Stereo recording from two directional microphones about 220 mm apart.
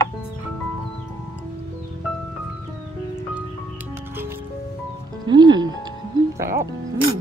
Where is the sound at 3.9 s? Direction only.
10° right (ahead or behind).